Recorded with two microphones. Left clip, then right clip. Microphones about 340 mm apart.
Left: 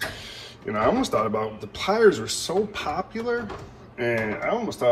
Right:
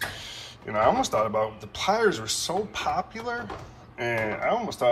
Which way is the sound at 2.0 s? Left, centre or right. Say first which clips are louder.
Left 5 dB; right.